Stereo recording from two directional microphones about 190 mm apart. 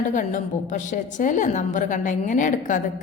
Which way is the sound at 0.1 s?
45° left (ahead or behind).